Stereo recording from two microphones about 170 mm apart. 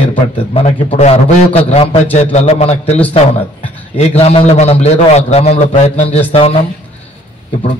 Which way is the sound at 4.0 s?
35° left (ahead or behind).